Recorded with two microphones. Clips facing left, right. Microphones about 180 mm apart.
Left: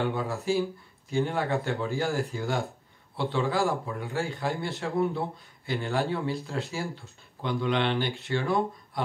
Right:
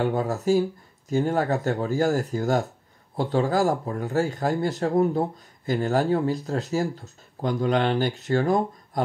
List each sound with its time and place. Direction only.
0.0 s speech: 45° right (ahead or behind)